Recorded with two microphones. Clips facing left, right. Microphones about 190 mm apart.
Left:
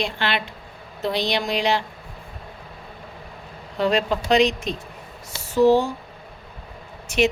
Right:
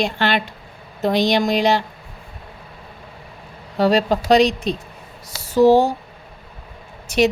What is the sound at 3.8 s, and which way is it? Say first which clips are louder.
Speech: right 4 dB; 40° right (ahead or behind).